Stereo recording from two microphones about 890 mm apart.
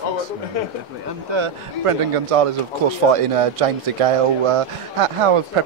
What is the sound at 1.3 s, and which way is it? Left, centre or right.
Speech, right.